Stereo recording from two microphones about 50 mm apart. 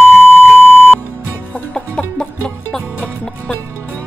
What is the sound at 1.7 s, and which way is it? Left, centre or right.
Music, centre.